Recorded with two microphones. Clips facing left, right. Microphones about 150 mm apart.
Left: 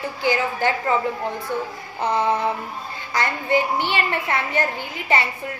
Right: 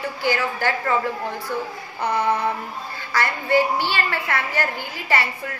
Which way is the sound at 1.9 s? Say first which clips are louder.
Left 1 dB; 25° left (ahead or behind).